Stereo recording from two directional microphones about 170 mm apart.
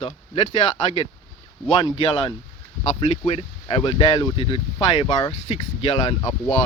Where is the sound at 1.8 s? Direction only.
30° left (ahead or behind).